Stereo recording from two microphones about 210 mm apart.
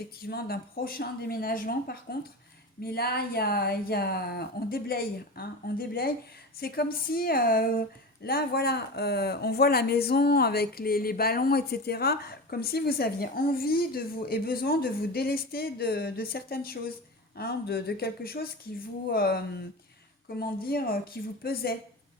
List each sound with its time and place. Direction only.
0.3 s speech: 50° left (ahead or behind)